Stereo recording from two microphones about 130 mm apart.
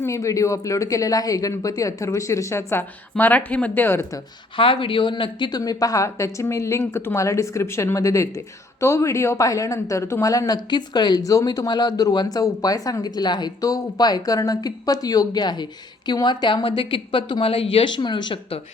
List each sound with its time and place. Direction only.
0.0 s speech: 25° left (ahead or behind)
4.5 s speech: 40° left (ahead or behind)